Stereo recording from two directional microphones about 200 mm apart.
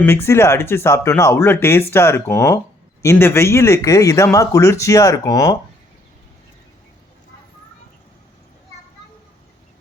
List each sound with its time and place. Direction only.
0.0 s speech: 10° left (ahead or behind)